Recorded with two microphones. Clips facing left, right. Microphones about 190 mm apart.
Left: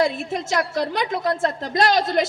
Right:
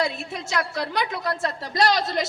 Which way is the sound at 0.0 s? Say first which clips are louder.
Left 5 dB; 50° left (ahead or behind).